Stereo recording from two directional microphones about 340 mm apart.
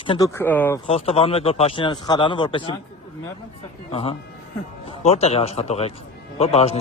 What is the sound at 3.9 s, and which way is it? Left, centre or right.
Speech, centre.